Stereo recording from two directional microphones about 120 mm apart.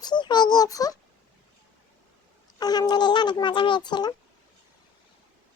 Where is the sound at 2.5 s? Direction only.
35° left (ahead or behind).